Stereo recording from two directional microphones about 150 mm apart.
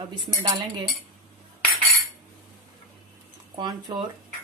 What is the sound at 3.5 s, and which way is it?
Speech, 30° right (ahead or behind).